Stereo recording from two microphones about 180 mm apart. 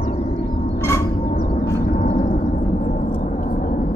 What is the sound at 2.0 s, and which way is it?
Gong, 45° left (ahead or behind).